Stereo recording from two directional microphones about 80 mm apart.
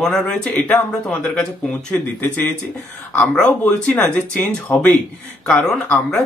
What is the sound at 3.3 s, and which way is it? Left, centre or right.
Speech, centre.